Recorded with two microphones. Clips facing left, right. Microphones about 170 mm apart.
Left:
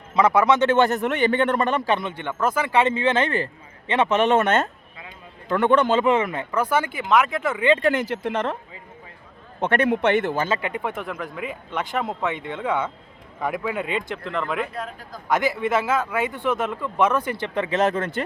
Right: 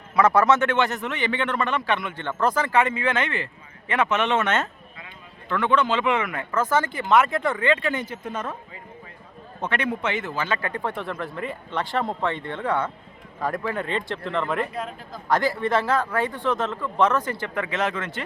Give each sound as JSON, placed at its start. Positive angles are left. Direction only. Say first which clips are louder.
{"t": 0.1, "sound": "speech", "louder": "even", "side_deg": 15}
{"t": 0.8, "sound": "a man's voice", "louder": "left 5 dB", "side_deg": 50}
{"t": 2.1, "sound": "speech", "louder": "even", "side_deg": 10}
{"t": 2.6, "sound": "speech", "louder": "left 2 dB", "side_deg": 20}
{"t": 5.5, "sound": "speech", "louder": "left 4 dB", "side_deg": 45}
{"t": 7.9, "sound": "speech", "louder": "left 6 dB", "side_deg": 80}
{"t": 9.6, "sound": "a man's voice", "louder": "left 7 dB", "side_deg": 55}
{"t": 10.6, "sound": "speech", "louder": "left 1 dB", "side_deg": 15}
{"t": 15.6, "sound": "speech", "louder": "even", "side_deg": 5}
{"t": 17.4, "sound": "speech", "louder": "left 3 dB", "side_deg": 25}
{"t": 17.7, "sound": "speech", "louder": "left 6 dB", "side_deg": 40}